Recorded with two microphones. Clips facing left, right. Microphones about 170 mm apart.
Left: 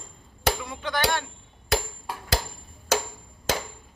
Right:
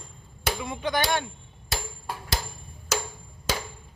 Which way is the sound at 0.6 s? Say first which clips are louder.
Right 1 dB; 15° right (ahead or behind).